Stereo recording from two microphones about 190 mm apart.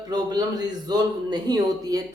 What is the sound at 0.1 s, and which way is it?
A man's voice, 20° right (ahead or behind).